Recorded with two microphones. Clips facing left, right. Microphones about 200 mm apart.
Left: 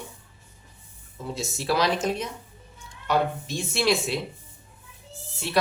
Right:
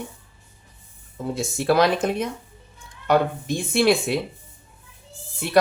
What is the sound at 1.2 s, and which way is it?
Speech, 55° right (ahead or behind).